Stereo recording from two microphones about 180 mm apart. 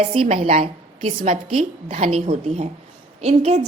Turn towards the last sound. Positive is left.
turn(degrees=-35)  # may be behind; listen again after turning